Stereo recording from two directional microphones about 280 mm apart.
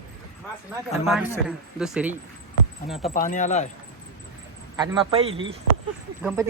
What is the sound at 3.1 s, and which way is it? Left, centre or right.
Speech, left.